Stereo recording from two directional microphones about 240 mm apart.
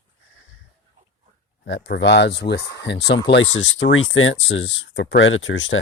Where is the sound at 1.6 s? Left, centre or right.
Left.